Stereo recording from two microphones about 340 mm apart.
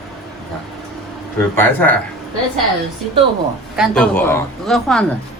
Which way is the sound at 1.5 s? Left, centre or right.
Centre.